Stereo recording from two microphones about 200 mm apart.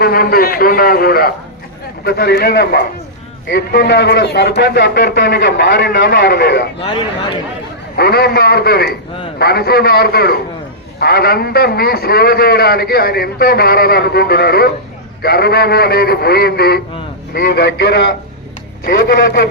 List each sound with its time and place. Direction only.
0.0 s a man's voice: 50° left (ahead or behind)
6.7 s speech: 25° left (ahead or behind)
7.9 s a man's voice: 50° left (ahead or behind)